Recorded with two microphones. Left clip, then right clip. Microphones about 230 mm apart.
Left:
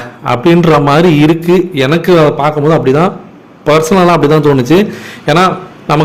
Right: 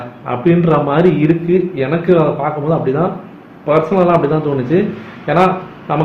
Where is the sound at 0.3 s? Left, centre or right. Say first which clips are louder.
Left 6 dB; left.